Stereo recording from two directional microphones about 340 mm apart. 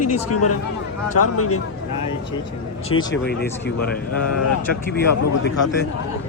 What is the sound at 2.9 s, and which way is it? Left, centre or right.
Speech, left.